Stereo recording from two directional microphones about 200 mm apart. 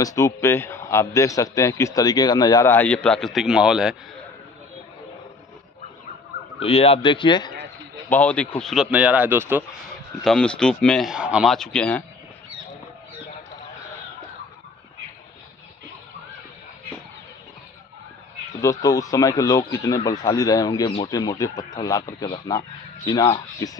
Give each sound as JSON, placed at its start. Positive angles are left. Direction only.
{"t": 0.0, "sound": "a man's voice", "side_deg": 15}
{"t": 6.6, "sound": "speech", "side_deg": 30}
{"t": 8.1, "sound": "speech", "side_deg": 5}
{"t": 10.2, "sound": "speech", "side_deg": 5}
{"t": 18.6, "sound": "a man's voice", "side_deg": 15}